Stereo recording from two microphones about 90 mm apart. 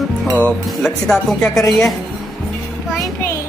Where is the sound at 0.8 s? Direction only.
5° left (ahead or behind).